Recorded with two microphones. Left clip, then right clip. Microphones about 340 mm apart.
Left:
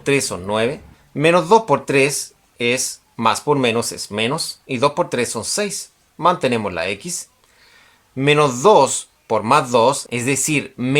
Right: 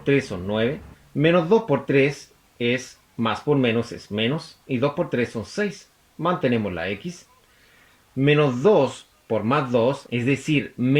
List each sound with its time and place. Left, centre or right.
0.0 s speech: left
8.3 s speech: left